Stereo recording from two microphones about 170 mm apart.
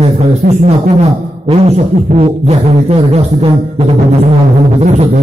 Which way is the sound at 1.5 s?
35° right (ahead or behind).